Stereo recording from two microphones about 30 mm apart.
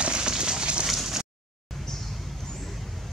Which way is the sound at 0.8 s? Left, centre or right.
Centre.